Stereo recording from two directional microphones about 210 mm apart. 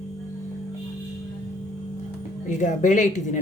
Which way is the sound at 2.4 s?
35° left (ahead or behind).